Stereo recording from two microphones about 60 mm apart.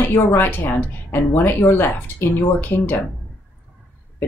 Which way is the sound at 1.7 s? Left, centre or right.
Left.